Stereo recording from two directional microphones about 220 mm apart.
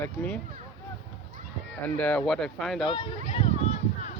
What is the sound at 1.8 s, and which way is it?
Speech, 5° left (ahead or behind).